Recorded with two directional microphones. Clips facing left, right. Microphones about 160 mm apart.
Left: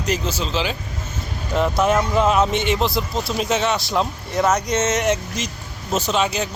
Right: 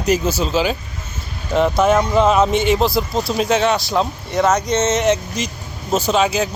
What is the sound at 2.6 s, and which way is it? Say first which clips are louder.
Speech: right 5 dB; 40° right (ahead or behind).